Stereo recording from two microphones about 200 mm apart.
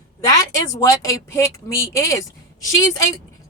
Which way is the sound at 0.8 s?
15° left (ahead or behind).